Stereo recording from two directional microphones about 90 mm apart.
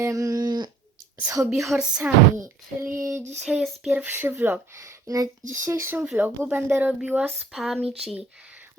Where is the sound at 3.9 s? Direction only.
25° right (ahead or behind).